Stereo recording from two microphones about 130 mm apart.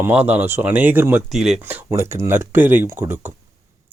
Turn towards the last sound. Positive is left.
turn(degrees=-15)  # may be behind; listen again after turning